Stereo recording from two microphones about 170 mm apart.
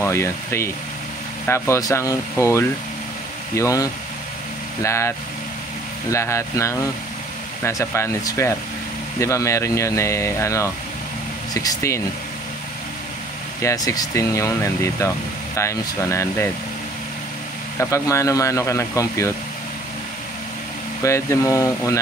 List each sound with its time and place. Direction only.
0.0 s speech: 15° left (ahead or behind)
13.6 s speech: 20° left (ahead or behind)
17.7 s speech: 15° left (ahead or behind)
21.0 s speech: 15° left (ahead or behind)